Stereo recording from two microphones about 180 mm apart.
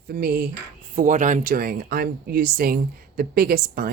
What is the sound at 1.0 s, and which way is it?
Speech, 45° right (ahead or behind).